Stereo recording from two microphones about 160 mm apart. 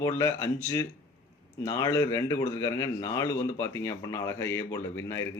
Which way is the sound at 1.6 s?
20° left (ahead or behind).